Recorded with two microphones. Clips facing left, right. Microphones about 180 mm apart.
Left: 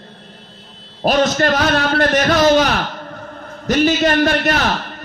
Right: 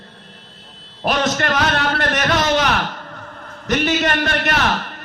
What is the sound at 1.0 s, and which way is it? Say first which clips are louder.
A man's voice: left 5 dB; 35° left (ahead or behind).